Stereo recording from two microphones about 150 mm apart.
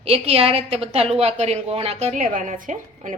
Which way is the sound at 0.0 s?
40° right (ahead or behind).